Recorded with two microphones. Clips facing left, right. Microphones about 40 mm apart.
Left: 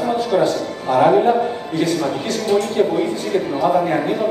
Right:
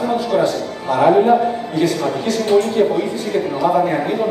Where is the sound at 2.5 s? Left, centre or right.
Centre.